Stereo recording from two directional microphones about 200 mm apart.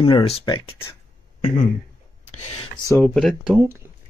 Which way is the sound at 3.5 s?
10° right (ahead or behind).